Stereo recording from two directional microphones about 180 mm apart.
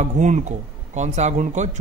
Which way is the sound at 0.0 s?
40° right (ahead or behind).